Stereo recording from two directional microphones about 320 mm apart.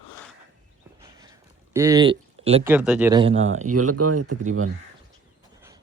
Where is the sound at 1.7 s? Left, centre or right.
Centre.